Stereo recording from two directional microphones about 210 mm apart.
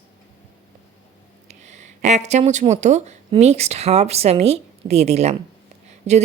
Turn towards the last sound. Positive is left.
turn(degrees=-30)  # may be behind; listen again after turning